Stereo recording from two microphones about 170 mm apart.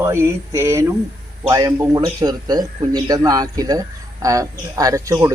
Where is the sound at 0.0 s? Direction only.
15° right (ahead or behind).